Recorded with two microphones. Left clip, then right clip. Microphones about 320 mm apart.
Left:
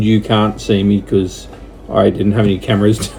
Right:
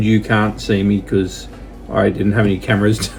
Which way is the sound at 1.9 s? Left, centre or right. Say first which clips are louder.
Left 3 dB; centre.